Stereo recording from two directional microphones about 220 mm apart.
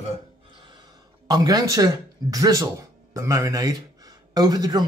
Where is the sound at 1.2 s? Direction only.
15° right (ahead or behind).